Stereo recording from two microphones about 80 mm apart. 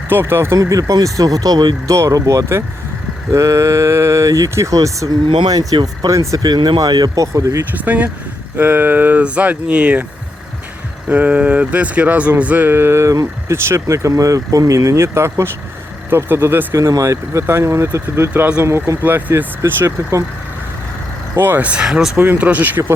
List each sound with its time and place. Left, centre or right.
0.1 s speech: right
1.9 s speech: right
5.2 s speech: right
5.5 s speech: right
6.1 s speech: right
7.9 s speech: centre
11.1 s speech: centre
16.7 s speech: right
21.3 s speech: right
21.7 s speech: centre
22.2 s speech: right